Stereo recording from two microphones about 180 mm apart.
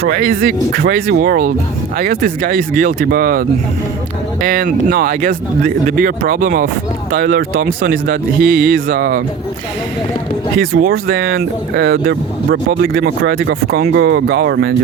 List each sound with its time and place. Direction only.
0.0 s speech: 55° right (ahead or behind)
4.4 s speech: 50° right (ahead or behind)
7.1 s speech: 60° right (ahead or behind)
10.6 s speech: 55° right (ahead or behind)